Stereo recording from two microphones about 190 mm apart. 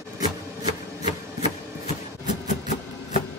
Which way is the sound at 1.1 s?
35° left (ahead or behind).